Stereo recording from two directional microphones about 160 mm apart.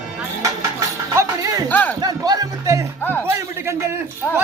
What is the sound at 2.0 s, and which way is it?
Music, 25° right (ahead or behind).